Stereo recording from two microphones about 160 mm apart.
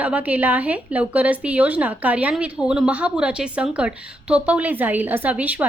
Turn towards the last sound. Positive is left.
turn(degrees=-10)  # may be behind; listen again after turning